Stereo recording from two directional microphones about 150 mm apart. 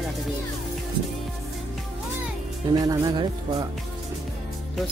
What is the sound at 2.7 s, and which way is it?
Speech, 25° right (ahead or behind).